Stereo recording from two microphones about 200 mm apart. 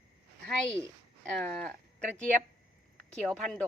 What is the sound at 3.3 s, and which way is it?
Speech, centre (ahead or behind).